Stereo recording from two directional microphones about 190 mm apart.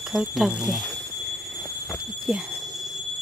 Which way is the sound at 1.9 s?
Centre (ahead or behind).